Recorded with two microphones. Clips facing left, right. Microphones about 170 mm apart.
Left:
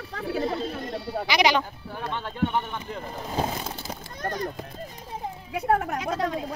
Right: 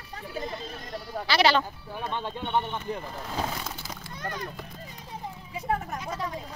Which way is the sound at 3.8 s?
45° left (ahead or behind).